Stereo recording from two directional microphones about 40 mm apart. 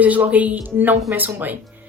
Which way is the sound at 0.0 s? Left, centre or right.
Right.